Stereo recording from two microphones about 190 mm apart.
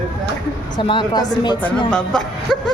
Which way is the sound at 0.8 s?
25° left (ahead or behind).